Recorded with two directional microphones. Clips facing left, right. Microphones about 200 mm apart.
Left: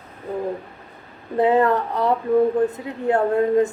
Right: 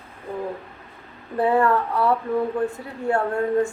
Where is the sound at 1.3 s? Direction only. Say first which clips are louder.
Left 2 dB; 20° left (ahead or behind).